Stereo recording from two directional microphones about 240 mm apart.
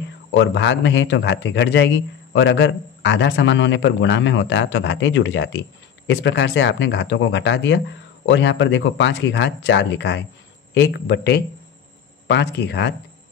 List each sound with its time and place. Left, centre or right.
0.3 s a man's voice: left